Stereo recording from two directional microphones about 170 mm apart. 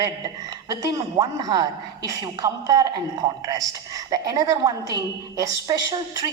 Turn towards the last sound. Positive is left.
turn(degrees=-20)  # may be behind; listen again after turning